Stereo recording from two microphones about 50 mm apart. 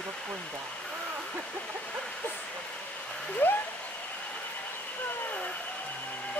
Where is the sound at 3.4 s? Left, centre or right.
Left.